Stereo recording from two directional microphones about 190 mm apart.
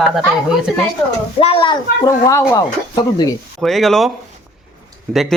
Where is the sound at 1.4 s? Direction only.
30° left (ahead or behind).